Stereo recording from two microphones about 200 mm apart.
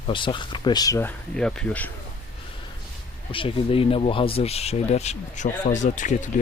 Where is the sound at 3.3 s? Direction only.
25° left (ahead or behind).